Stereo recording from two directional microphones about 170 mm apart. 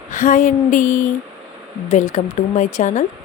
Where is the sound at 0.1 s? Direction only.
50° left (ahead or behind).